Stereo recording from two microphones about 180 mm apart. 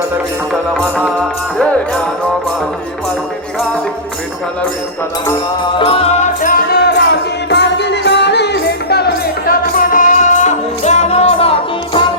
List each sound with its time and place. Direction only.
0.7 s music: 5° right (ahead or behind)
5.8 s music: 35° left (ahead or behind); by 9.0 s 65° left (ahead or behind)
9.5 s music: 50° left (ahead or behind)